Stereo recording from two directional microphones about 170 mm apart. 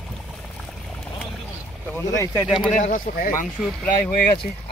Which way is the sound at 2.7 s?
45° left (ahead or behind).